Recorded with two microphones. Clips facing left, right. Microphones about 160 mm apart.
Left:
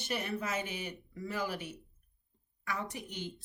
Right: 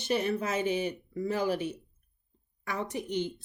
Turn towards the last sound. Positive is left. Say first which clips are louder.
# right 9 dB
turn(degrees=-20)  # may be behind; listen again after turning